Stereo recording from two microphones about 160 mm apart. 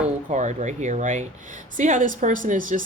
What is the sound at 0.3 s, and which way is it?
Speech, 50° right (ahead or behind).